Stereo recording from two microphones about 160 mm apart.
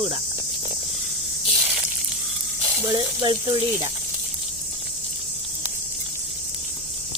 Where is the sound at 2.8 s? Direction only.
25° right (ahead or behind).